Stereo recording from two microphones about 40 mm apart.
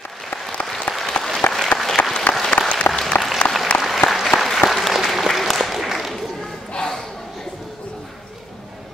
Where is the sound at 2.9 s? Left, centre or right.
Left.